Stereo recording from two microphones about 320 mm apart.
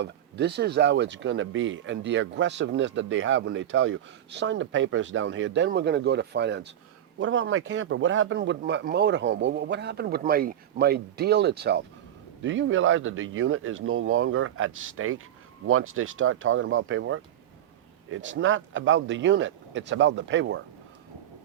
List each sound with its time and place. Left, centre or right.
0.0 s speech: right